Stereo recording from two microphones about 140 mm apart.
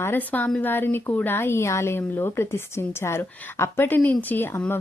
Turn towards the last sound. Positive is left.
turn(degrees=15)  # may be behind; listen again after turning